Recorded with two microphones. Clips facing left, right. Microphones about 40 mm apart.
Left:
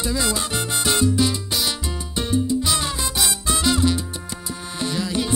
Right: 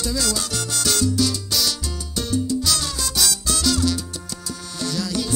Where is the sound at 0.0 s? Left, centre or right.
Left.